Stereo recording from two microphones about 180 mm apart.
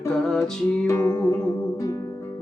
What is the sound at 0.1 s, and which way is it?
Music, 5° left (ahead or behind).